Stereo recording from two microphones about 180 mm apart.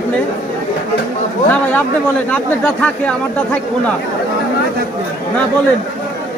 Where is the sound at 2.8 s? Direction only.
10° left (ahead or behind).